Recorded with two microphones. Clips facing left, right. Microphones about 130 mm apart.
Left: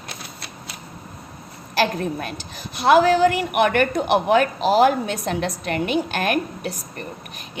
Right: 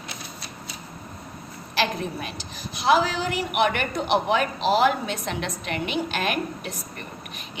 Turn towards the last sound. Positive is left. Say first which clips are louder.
# left 5 dB
turn(degrees=40)  # may be behind; listen again after turning